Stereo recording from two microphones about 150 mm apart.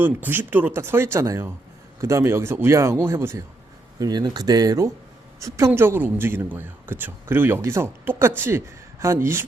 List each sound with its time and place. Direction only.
0.0 s speech: 15° right (ahead or behind)